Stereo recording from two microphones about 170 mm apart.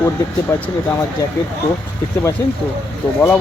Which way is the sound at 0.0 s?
15° left (ahead or behind).